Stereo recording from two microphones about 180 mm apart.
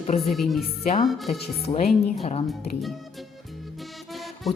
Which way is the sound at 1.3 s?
35° left (ahead or behind).